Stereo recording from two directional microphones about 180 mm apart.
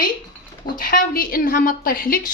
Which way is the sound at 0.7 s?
50° left (ahead or behind).